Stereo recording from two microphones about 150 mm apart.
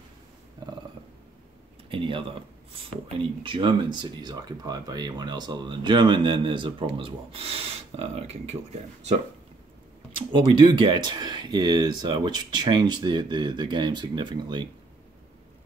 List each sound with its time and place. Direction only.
1.9 s speech: 35° right (ahead or behind)
3.4 s speech: 35° right (ahead or behind)
10.3 s speech: 30° right (ahead or behind)